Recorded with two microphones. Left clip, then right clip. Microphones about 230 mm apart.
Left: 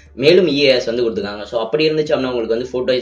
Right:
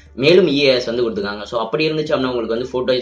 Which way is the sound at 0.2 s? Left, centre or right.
Centre.